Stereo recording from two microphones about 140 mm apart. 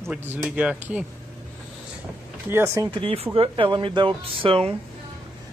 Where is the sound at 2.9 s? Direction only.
40° right (ahead or behind).